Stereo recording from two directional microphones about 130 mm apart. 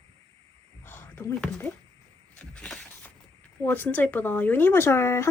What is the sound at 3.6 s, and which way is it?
Speech, 15° left (ahead or behind).